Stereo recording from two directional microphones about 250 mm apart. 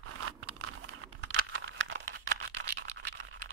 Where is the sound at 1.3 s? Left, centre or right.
Right.